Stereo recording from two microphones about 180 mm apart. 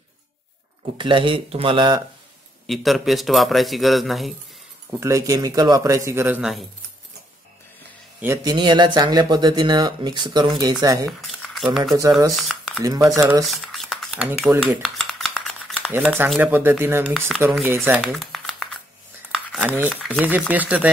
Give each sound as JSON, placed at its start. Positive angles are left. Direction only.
{"t": 0.9, "sound": "speech", "side_deg": -30}
{"t": 2.6, "sound": "speech", "side_deg": 0}
{"t": 5.0, "sound": "a man's voice", "side_deg": -15}
{"t": 8.2, "sound": "speech", "side_deg": -20}
{"t": 11.1, "sound": "speech", "side_deg": 0}
{"t": 12.4, "sound": "a sound", "side_deg": 0}
{"t": 12.8, "sound": "speech", "side_deg": -20}
{"t": 13.5, "sound": "speech", "side_deg": 0}
{"t": 14.8, "sound": "dishes", "side_deg": 0}
{"t": 16.3, "sound": "a man's voice", "side_deg": -10}
{"t": 18.1, "sound": "shuffling cards", "side_deg": 0}
{"t": 19.3, "sound": "a sound", "side_deg": 0}
{"t": 20.2, "sound": "a man's voice", "side_deg": -10}